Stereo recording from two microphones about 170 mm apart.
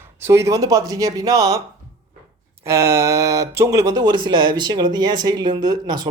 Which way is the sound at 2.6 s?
15° right (ahead or behind).